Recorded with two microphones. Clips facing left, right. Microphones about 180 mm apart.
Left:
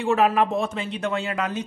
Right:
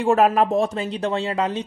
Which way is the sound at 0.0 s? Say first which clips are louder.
Right 3 dB; 45° right (ahead or behind).